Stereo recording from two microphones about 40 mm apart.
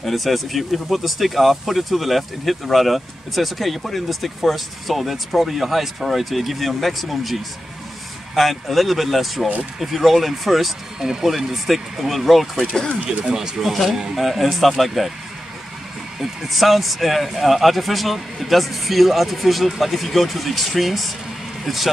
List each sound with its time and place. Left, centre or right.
0.0 s speech: centre
8.4 s speech: centre
11.0 s speech: centre
11.2 s speech: centre
12.5 s speech: centre
13.0 s speech: right
13.3 s speech: centre
16.2 s speech: centre